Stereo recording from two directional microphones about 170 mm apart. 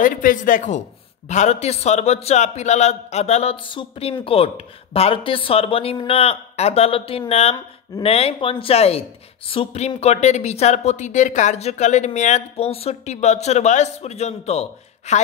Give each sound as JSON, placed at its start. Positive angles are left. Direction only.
{"t": 0.0, "sound": "speech", "side_deg": 55}